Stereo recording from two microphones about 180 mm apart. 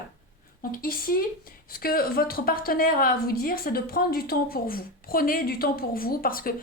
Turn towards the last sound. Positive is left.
turn(degrees=55)  # may be behind; listen again after turning